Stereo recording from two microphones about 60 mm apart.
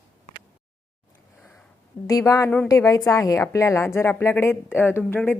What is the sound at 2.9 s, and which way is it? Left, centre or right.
Speech, left.